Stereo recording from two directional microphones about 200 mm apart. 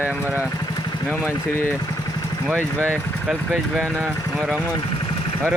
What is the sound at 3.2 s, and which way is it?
Speech, centre (ahead or behind).